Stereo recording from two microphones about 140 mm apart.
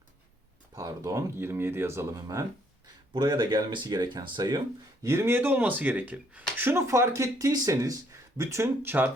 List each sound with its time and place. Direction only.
0.8 s speech: 25° right (ahead or behind)
5.0 s speech: 20° right (ahead or behind)